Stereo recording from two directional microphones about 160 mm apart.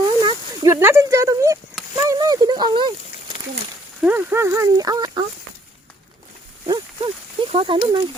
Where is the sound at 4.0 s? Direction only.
10° right (ahead or behind).